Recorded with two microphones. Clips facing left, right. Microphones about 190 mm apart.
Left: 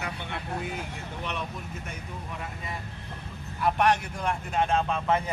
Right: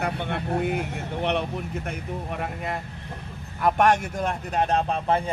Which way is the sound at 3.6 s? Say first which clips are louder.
Right 4 dB; 50° right (ahead or behind).